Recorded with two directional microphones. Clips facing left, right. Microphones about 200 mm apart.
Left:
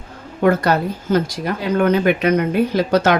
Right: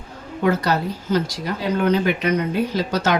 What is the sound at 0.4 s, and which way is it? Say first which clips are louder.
Speech: left 4 dB; 55° left (ahead or behind).